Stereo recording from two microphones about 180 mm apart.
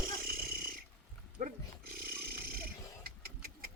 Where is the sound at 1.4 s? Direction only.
55° right (ahead or behind).